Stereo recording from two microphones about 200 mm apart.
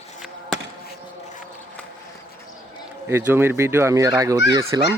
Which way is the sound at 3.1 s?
10° right (ahead or behind).